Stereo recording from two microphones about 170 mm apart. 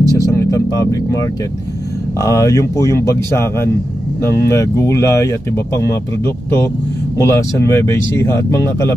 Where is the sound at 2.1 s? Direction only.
20° left (ahead or behind).